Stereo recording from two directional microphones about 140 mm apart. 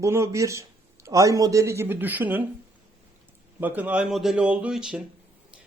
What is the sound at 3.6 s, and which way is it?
A man's voice, 15° right (ahead or behind).